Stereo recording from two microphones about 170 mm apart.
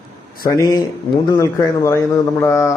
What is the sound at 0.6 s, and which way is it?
A man's voice, 20° left (ahead or behind).